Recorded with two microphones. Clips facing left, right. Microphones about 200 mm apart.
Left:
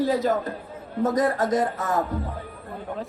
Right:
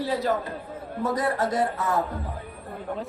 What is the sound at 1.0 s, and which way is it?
Speech, 40° left (ahead or behind).